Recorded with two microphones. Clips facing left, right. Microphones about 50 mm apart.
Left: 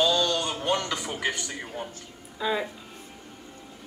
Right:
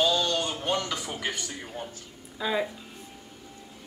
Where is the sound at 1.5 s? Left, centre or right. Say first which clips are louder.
Left 2 dB; centre.